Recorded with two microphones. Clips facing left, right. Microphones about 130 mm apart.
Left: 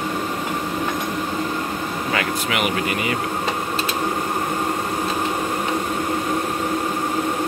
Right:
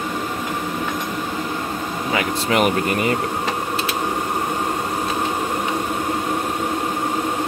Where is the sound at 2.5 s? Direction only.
40° right (ahead or behind).